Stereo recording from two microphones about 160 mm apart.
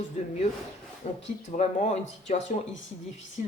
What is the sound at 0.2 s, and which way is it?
Speech, 50° left (ahead or behind).